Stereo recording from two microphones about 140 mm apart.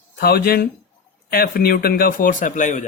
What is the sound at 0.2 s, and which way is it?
A man's voice, 90° left.